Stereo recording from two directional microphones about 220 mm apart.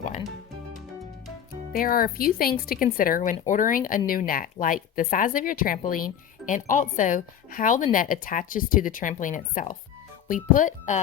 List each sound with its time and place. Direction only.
1.7 s speech: 40° left (ahead or behind)